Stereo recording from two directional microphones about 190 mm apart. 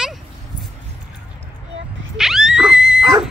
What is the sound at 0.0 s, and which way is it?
Dog, centre (ahead or behind).